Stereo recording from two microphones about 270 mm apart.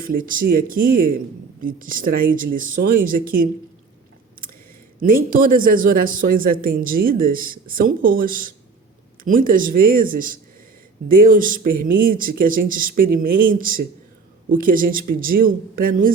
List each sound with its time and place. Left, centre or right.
0.0 s speech: right
4.9 s speech: right